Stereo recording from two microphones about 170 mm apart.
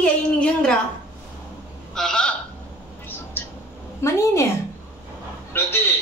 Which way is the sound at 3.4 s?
15° left (ahead or behind).